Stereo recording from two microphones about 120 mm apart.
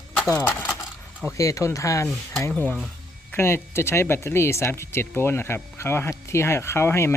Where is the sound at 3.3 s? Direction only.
20° left (ahead or behind).